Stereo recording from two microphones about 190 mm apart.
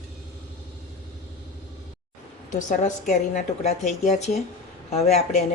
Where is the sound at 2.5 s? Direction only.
40° left (ahead or behind).